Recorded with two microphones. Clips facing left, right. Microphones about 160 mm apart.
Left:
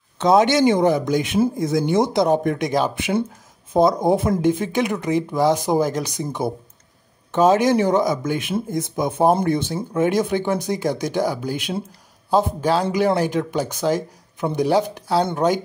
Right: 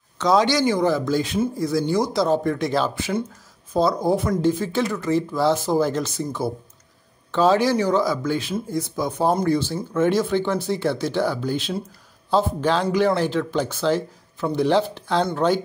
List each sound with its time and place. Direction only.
0.2 s speech: 20° left (ahead or behind)